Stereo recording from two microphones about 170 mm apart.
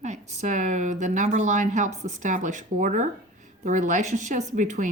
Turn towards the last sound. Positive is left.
turn(degrees=-50)  # may be behind; listen again after turning